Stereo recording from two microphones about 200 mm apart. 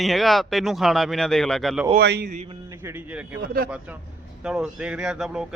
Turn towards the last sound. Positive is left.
turn(degrees=-5)  # may be behind; listen again after turning